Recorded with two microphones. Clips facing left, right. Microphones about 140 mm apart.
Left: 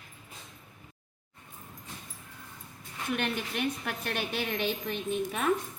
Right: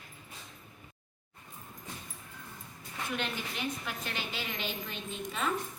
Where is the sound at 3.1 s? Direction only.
65° left (ahead or behind).